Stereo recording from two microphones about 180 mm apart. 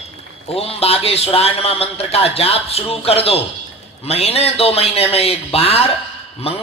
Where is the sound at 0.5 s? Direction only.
35° left (ahead or behind).